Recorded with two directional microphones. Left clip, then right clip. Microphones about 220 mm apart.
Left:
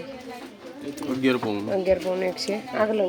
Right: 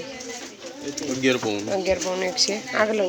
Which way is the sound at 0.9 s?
40° left (ahead or behind).